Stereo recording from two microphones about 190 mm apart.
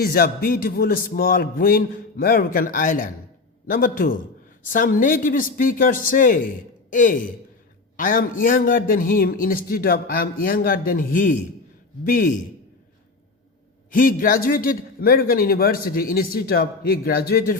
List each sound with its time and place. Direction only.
0.0 s a man's voice: 50° left (ahead or behind)
13.9 s a man's voice: 45° left (ahead or behind)